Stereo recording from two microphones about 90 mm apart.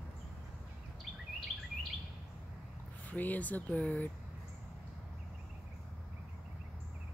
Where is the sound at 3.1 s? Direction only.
20° left (ahead or behind).